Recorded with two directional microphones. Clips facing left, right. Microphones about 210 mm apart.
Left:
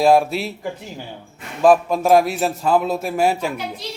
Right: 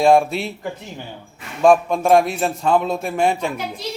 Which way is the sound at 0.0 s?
5° left (ahead or behind).